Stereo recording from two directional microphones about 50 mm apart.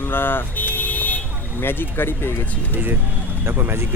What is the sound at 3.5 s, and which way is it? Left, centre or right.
Speech, right.